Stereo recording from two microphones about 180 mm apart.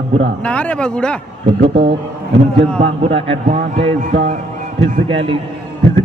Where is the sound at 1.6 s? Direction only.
35° right (ahead or behind).